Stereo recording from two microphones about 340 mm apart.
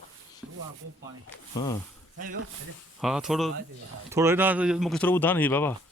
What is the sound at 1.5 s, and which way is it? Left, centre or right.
Speech, centre.